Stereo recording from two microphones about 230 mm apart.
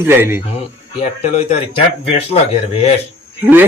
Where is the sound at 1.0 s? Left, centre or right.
Left.